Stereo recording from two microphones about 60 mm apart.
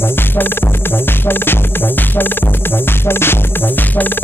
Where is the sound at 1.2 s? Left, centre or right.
Left.